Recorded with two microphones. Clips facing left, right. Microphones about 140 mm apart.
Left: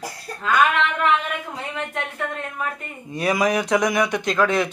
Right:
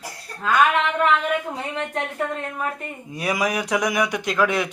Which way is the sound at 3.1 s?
10° right (ahead or behind).